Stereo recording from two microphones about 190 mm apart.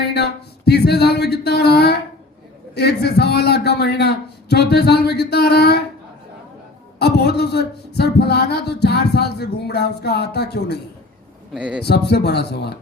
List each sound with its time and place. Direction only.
0.1 s speech: 60° left (ahead or behind)
7.0 s speech: 60° left (ahead or behind)
11.5 s a man's voice: 5° right (ahead or behind)
11.8 s speech: 60° left (ahead or behind)